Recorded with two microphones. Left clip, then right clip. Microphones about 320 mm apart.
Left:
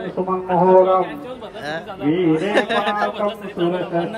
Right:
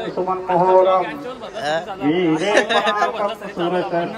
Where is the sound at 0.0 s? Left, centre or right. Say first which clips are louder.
Right 1 dB; right.